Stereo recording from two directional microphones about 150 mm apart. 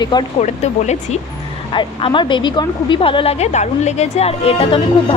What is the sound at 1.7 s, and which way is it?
A woman's voice, 35° left (ahead or behind).